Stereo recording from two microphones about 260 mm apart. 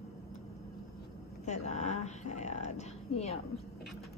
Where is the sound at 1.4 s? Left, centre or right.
Left.